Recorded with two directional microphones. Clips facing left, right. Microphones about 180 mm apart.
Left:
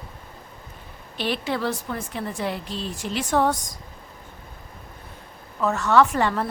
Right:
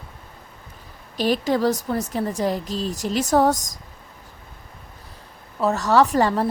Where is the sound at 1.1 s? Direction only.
40° right (ahead or behind).